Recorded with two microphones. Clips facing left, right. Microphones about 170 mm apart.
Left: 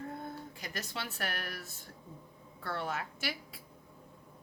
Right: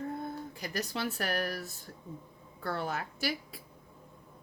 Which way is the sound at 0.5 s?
35° right (ahead or behind).